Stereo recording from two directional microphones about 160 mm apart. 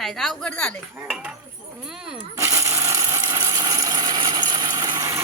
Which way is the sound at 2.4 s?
20° right (ahead or behind).